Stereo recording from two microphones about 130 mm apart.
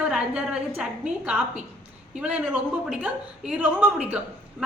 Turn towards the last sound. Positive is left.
turn(degrees=-10)  # may be behind; listen again after turning